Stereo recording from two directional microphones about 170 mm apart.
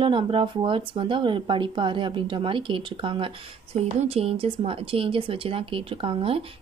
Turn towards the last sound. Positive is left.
turn(degrees=-30)  # may be behind; listen again after turning